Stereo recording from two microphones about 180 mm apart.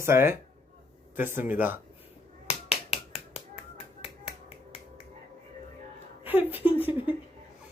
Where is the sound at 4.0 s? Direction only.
30° left (ahead or behind).